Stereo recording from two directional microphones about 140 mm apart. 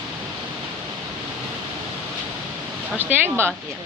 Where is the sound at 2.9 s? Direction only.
15° right (ahead or behind).